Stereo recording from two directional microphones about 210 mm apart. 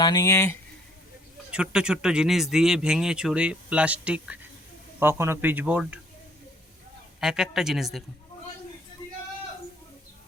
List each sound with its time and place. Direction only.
0.0 s speech: 15° left (ahead or behind)
1.5 s speech: 5° right (ahead or behind)
7.2 s speech: 5° right (ahead or behind)